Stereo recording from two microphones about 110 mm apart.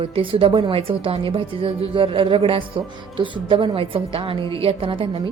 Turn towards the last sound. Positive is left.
turn(degrees=-55)  # may be behind; listen again after turning